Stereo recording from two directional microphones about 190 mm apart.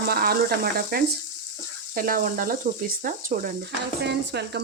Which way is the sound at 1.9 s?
50° right (ahead or behind).